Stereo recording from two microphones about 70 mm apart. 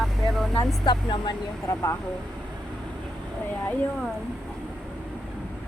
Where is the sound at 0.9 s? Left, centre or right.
Left.